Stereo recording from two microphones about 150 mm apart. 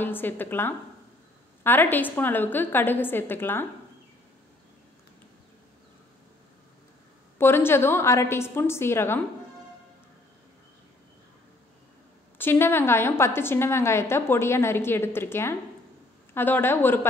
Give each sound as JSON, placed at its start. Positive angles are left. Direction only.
{"t": 0.0, "sound": "a woman's voice", "side_deg": 15}
{"t": 7.3, "sound": "a woman's voice", "side_deg": 15}
{"t": 12.4, "sound": "a woman's voice", "side_deg": 15}